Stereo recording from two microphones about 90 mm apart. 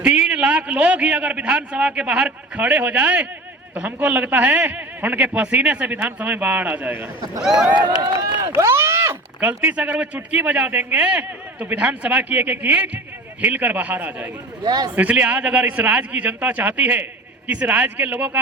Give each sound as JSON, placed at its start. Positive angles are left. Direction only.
{"t": 0.0, "sound": "a man's voice", "side_deg": -15}
{"t": 8.5, "sound": "a sound", "side_deg": -30}
{"t": 9.4, "sound": "a man's voice", "side_deg": -20}
{"t": 14.6, "sound": "a man's voice", "side_deg": -50}
{"t": 14.9, "sound": "a man's voice", "side_deg": -15}